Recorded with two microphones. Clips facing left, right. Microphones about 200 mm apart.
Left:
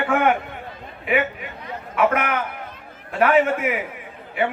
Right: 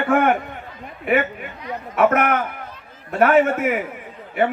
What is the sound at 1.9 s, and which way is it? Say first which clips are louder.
A man's voice: right 3 dB; 45° right (ahead or behind).